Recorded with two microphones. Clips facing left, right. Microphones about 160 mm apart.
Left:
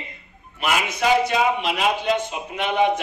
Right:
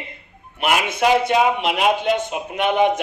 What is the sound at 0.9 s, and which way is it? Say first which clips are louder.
A man's voice: right 2 dB; 55° right (ahead or behind).